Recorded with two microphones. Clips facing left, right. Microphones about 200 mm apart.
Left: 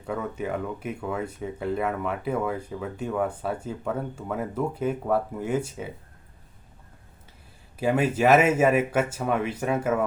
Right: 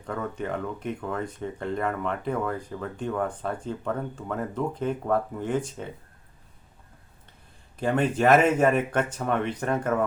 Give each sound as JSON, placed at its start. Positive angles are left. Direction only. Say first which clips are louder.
{"t": 0.0, "sound": "speech", "louder": "left 1 dB", "side_deg": 5}
{"t": 7.8, "sound": "speech", "louder": "left 1 dB", "side_deg": 5}